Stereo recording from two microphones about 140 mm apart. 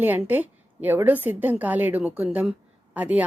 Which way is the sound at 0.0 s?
15° right (ahead or behind).